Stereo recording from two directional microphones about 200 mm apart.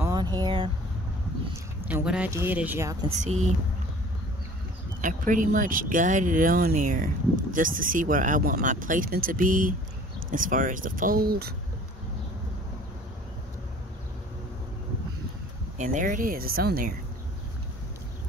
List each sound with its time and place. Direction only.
0.0 s a sound: 20° right (ahead or behind)
1.9 s speech: 5° right (ahead or behind)
3.3 s speech: 35° right (ahead or behind)
5.0 s speech: 40° right (ahead or behind)
15.8 s speech: 40° right (ahead or behind)